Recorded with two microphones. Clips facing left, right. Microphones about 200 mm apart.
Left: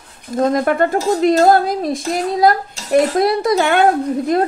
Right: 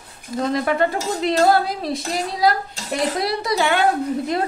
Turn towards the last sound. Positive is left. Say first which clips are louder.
# left 5 dB
turn(degrees=50)  # may be behind; listen again after turning